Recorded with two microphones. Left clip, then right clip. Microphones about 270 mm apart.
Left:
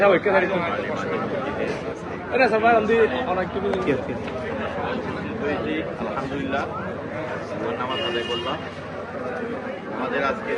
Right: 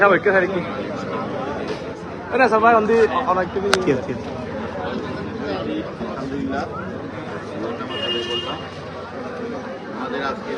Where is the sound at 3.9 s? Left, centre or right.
Centre.